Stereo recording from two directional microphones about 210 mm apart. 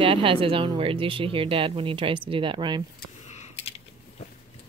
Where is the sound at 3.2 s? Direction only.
35° left (ahead or behind).